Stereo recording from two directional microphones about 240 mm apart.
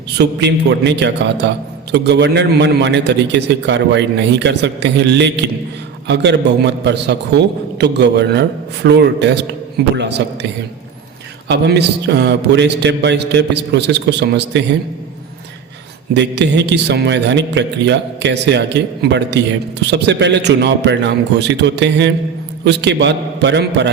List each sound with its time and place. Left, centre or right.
0.2 s a man's voice: right
11.4 s a man's voice: right
16.1 s a man's voice: right